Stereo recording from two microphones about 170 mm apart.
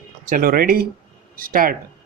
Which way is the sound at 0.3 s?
55° right (ahead or behind).